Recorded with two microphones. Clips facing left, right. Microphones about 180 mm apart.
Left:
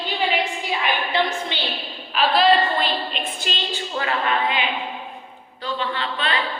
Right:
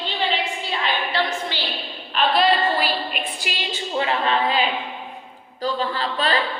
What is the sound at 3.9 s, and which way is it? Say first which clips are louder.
Speech: right 2 dB; 25° right (ahead or behind).